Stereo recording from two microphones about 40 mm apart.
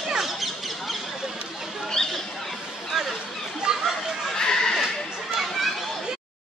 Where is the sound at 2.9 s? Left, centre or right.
Centre.